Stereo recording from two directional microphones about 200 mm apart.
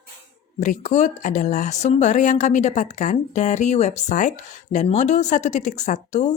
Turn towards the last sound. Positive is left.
turn(degrees=35)  # may be behind; listen again after turning